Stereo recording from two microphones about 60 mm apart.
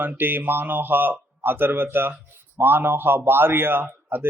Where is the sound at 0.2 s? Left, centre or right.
Right.